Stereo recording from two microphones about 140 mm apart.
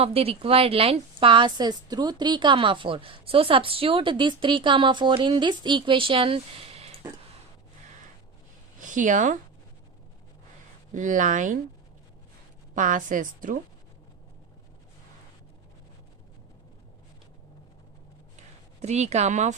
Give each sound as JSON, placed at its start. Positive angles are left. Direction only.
{"t": 0.0, "sound": "a woman's voice", "side_deg": -45}
{"t": 8.8, "sound": "speech", "side_deg": -65}
{"t": 10.9, "sound": "speech", "side_deg": -65}
{"t": 12.7, "sound": "a woman's voice", "side_deg": -65}
{"t": 18.3, "sound": "a sound", "side_deg": -55}